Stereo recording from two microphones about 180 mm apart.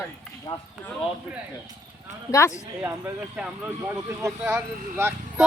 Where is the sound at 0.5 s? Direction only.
20° left (ahead or behind).